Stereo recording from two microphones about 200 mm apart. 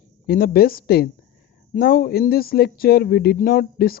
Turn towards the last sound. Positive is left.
turn(degrees=50)  # may be behind; listen again after turning